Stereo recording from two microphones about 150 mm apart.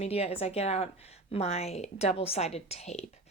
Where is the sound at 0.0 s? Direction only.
40° left (ahead or behind).